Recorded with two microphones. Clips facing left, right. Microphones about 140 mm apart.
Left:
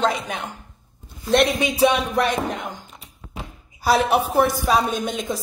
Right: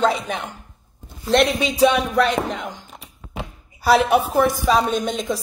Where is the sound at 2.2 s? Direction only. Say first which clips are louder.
Right 2 dB; 50° left (ahead or behind).